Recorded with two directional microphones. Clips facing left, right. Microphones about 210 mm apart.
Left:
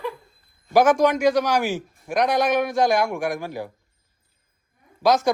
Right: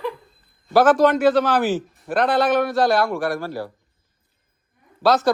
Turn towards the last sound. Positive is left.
turn(degrees=15)  # may be behind; listen again after turning